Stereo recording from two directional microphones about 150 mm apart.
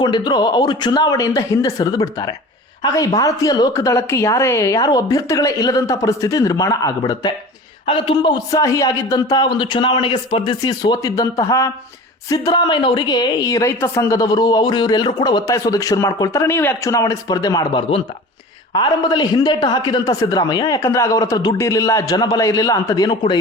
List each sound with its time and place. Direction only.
0.0 s a woman's voice: 30° left (ahead or behind)